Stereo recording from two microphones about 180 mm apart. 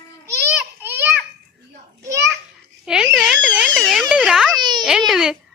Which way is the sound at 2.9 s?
5° right (ahead or behind).